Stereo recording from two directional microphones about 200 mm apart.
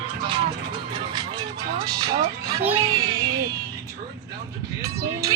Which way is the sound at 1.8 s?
20° right (ahead or behind).